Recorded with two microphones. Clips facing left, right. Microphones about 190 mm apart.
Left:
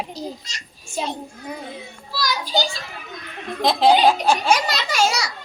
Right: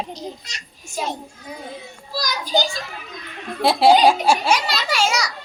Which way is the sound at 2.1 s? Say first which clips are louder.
Right 1 dB; 45° right (ahead or behind).